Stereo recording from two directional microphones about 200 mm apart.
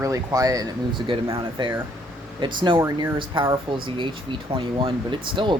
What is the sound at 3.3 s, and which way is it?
Speech, 25° right (ahead or behind).